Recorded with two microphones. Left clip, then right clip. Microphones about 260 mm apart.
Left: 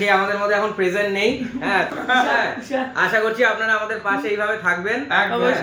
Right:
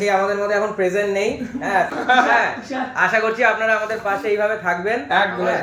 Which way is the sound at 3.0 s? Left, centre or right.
Left.